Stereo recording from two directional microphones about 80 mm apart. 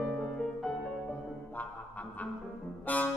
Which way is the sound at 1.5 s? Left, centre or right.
Centre.